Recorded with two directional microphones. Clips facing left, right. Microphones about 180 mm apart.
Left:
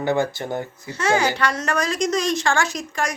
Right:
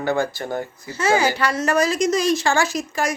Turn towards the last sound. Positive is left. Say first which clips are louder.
# right 3 dB
turn(degrees=-5)  # may be behind; listen again after turning